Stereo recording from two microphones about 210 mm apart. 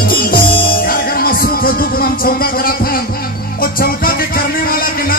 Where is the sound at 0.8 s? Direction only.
45° left (ahead or behind).